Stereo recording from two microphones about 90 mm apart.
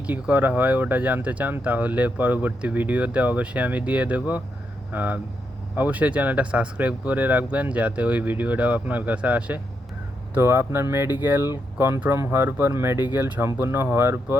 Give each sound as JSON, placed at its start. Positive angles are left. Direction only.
{"t": 0.1, "sound": "speech", "side_deg": -20}
{"t": 10.3, "sound": "speech", "side_deg": -25}